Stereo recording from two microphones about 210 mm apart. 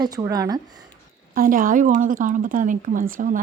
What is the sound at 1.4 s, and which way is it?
A woman's voice, 40° right (ahead or behind).